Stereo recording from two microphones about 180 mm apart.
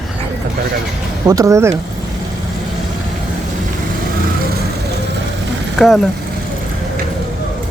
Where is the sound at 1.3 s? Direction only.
20° right (ahead or behind).